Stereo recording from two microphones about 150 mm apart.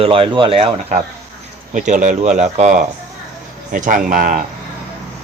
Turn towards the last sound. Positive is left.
turn(degrees=-60)  # may be behind; listen again after turning